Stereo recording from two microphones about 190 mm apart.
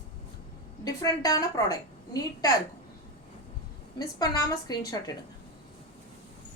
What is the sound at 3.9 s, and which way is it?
A woman's voice, 20° left (ahead or behind).